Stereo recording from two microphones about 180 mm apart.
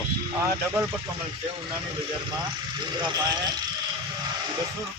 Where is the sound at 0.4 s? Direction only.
15° right (ahead or behind).